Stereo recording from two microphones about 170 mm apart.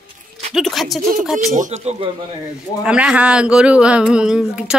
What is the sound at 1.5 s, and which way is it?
Speech, 45° right (ahead or behind).